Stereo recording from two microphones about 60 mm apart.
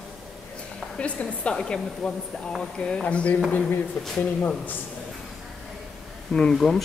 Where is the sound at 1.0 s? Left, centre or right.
Left.